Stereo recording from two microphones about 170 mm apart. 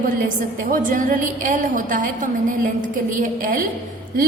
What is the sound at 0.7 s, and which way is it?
A woman's voice, 50° right (ahead or behind).